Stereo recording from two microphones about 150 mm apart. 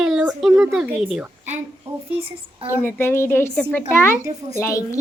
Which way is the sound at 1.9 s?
45° right (ahead or behind).